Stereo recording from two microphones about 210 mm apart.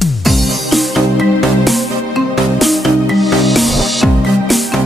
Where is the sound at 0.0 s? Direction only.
Centre (ahead or behind).